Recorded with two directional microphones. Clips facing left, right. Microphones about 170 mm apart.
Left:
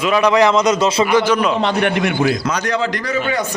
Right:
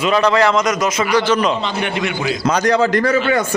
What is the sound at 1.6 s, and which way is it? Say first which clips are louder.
Speech: left 4 dB; 60° left (ahead or behind).